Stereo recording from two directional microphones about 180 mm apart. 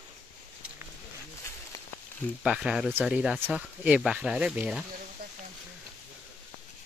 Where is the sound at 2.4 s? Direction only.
5° right (ahead or behind).